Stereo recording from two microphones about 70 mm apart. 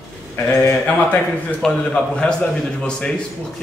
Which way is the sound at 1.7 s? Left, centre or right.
Centre.